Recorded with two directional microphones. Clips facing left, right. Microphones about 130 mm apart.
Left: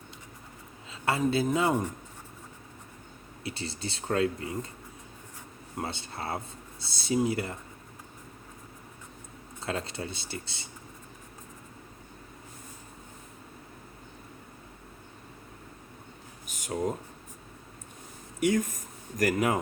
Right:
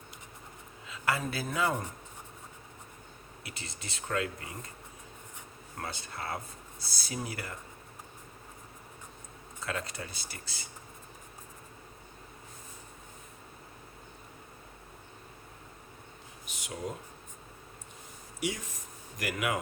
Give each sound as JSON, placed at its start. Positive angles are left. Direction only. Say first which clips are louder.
{"t": 0.9, "sound": "speech", "louder": "left 5 dB", "side_deg": 30}
{"t": 3.4, "sound": "speech", "louder": "left 10 dB", "side_deg": 30}
{"t": 5.7, "sound": "speech", "louder": "left 4 dB", "side_deg": 25}
{"t": 9.6, "sound": "speech", "louder": "left 4 dB", "side_deg": 30}
{"t": 16.5, "sound": "a sound", "louder": "left 6 dB", "side_deg": 45}
{"t": 18.3, "sound": "a sound", "louder": "left 10 dB", "side_deg": 50}